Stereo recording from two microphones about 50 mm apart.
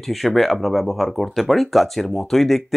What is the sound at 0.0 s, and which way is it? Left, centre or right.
Speech, centre.